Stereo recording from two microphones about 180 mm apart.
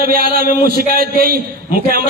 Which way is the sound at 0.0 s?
55° right (ahead or behind).